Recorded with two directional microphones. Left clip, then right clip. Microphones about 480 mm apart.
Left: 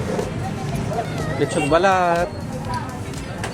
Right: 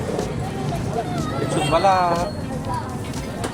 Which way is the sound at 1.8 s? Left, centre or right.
Left.